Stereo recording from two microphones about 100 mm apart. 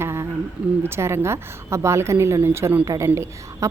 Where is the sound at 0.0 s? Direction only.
25° right (ahead or behind).